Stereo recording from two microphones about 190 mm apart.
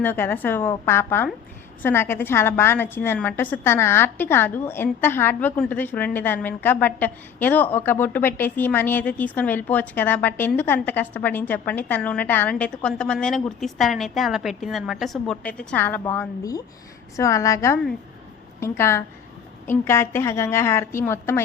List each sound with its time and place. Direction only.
0.0 s a woman's voice: 10° left (ahead or behind)